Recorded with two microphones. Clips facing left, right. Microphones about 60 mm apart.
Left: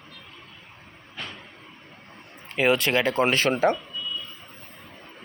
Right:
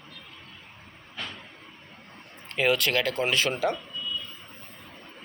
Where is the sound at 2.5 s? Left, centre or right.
Centre; by 3.5 s left.